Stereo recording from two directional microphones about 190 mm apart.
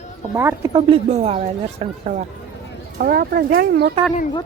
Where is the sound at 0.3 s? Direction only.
10° right (ahead or behind).